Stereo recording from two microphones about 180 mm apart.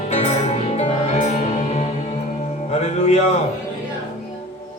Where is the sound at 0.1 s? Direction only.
35° left (ahead or behind).